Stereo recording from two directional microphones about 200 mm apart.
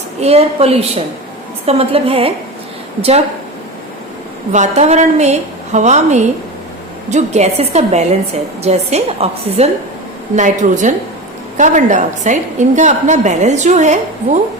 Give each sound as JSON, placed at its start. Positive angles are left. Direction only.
{"t": 0.2, "sound": "a woman's voice", "side_deg": -30}
{"t": 4.5, "sound": "a woman's voice", "side_deg": -35}